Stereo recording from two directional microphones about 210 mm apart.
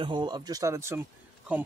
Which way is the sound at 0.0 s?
20° right (ahead or behind).